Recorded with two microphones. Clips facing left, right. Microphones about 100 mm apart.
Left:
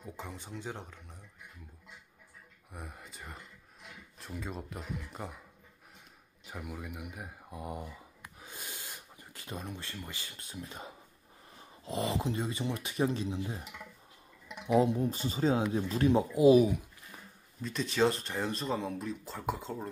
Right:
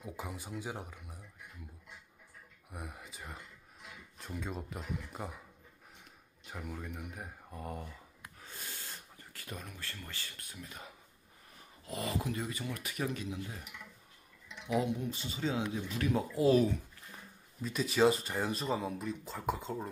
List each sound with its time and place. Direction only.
0.0 s speech: 10° right (ahead or behind)
2.7 s speech: centre (ahead or behind)
6.4 s speech: 5° left (ahead or behind)
8.4 s a sound: 15° left (ahead or behind)
11.8 s speech: 25° left (ahead or behind)
17.6 s speech: 5° right (ahead or behind)